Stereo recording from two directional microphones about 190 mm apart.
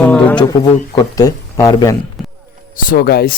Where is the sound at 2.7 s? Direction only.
45° left (ahead or behind).